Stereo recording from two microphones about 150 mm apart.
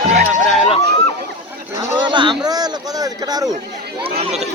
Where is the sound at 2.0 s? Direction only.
30° right (ahead or behind).